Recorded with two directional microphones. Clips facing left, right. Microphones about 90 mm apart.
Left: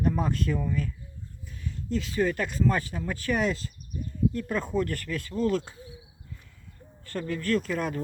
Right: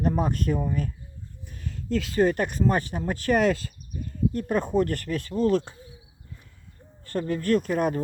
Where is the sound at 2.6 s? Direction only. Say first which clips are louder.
Right 1 dB; 25° right (ahead or behind).